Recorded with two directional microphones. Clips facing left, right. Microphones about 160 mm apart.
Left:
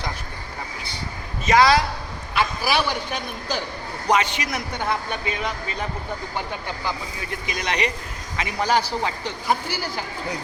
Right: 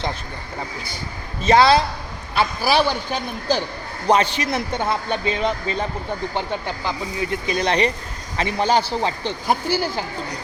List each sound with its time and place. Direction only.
1.5 s a man's voice: 30° right (ahead or behind)
6.8 s a man's voice: 25° right (ahead or behind)